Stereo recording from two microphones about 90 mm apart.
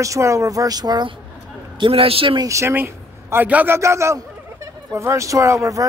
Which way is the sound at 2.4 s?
35° right (ahead or behind).